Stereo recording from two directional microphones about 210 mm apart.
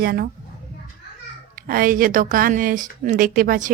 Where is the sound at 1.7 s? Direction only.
40° right (ahead or behind).